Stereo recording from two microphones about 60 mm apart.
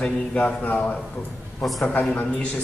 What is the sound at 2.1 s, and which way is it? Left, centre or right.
Speech, left.